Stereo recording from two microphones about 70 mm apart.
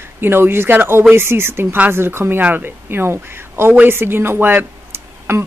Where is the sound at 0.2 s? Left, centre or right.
Right.